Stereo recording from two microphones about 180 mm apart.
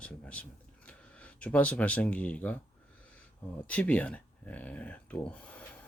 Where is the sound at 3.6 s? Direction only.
10° left (ahead or behind).